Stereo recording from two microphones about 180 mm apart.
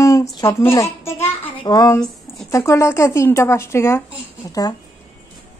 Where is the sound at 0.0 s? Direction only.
20° left (ahead or behind).